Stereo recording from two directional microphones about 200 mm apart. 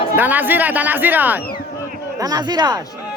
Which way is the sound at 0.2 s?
10° right (ahead or behind).